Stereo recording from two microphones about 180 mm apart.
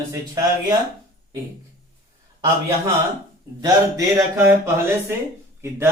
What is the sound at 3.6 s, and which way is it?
Speech, 15° right (ahead or behind).